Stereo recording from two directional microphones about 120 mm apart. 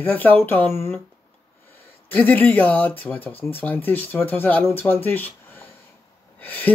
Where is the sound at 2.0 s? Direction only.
15° left (ahead or behind).